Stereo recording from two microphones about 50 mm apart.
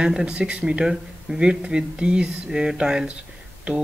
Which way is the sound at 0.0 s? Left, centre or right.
Centre.